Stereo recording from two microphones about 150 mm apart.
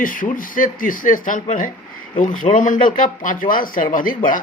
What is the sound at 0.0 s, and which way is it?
Speech, 65° left (ahead or behind).